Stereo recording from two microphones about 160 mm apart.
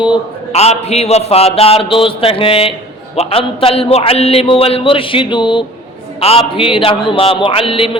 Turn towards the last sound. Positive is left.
turn(degrees=35)  # may be behind; listen again after turning